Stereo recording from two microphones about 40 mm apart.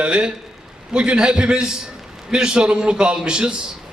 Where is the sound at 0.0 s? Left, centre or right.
Right.